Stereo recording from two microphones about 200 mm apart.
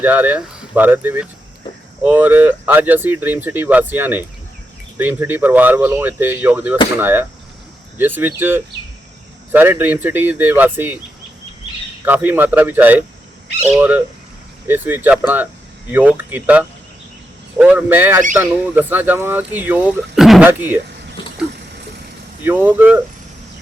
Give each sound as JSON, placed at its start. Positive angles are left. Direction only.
{"t": 0.0, "sound": "speech", "side_deg": -10}
{"t": 12.0, "sound": "speech", "side_deg": -10}
{"t": 21.2, "sound": "a sound", "side_deg": 25}
{"t": 22.4, "sound": "speech", "side_deg": -10}